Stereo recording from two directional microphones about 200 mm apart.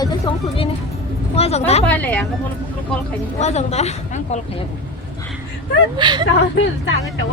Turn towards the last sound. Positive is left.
turn(degrees=65)  # may be behind; listen again after turning